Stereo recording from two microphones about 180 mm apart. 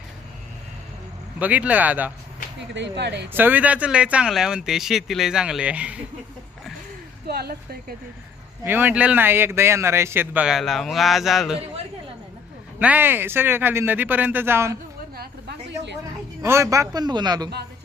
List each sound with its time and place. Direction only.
1.4 s speech: 10° right (ahead or behind)
2.7 s speech: 70° right (ahead or behind)
3.3 s speech: 10° right (ahead or behind)
7.3 s speech: 60° right (ahead or behind)
8.6 s speech: 10° right (ahead or behind)
12.8 s speech: 10° right (ahead or behind)
15.1 s a sound: 60° right (ahead or behind)
16.4 s speech: 15° right (ahead or behind)